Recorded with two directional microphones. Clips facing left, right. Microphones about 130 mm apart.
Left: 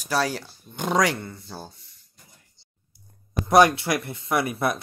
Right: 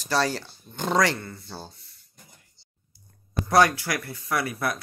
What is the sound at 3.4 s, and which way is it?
Speech, 20° left (ahead or behind).